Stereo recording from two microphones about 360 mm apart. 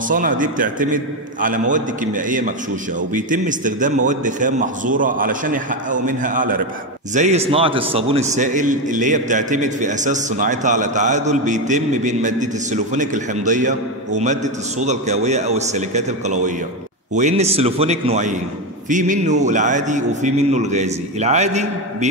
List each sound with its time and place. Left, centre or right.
0.1 s a man's voice: right